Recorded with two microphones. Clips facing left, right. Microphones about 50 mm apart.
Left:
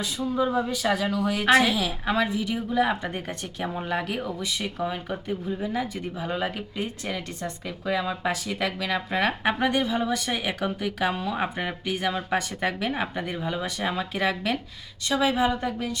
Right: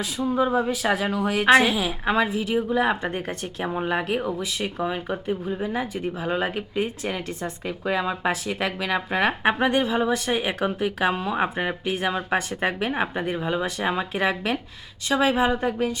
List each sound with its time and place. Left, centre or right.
0.3 s a woman's voice: centre